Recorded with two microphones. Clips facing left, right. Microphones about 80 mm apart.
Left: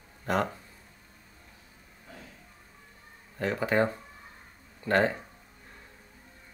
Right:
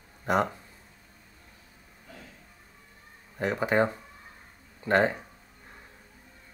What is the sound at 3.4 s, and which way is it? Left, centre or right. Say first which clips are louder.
Speech: right 1 dB; centre.